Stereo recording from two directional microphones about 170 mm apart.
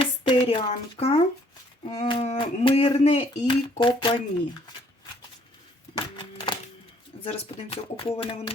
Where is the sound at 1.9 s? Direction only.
25° left (ahead or behind).